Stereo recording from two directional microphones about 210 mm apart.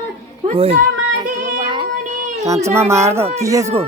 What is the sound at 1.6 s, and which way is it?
Child singing, 20° right (ahead or behind).